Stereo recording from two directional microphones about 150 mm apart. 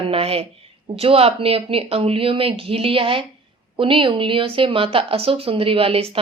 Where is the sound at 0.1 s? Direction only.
40° right (ahead or behind).